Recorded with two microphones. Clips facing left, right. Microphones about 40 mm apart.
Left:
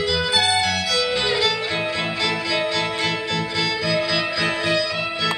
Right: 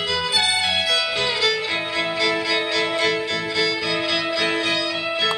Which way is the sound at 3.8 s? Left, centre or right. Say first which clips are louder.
Left 1 dB; right.